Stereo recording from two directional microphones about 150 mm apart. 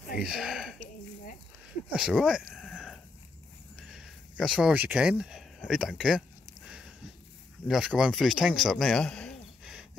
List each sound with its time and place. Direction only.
0.2 s speech: 5° right (ahead or behind)
1.9 s a sound: 5° right (ahead or behind)
3.7 s speech: 5° right (ahead or behind)
7.6 s speech: 5° right (ahead or behind)